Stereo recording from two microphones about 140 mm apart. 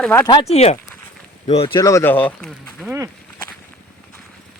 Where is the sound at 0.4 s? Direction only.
50° left (ahead or behind).